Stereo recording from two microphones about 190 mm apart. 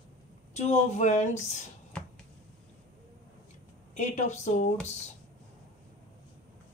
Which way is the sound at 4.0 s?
40° left (ahead or behind).